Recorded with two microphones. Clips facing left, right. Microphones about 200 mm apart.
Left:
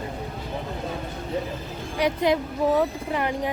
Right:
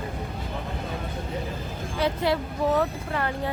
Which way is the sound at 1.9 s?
15° left (ahead or behind).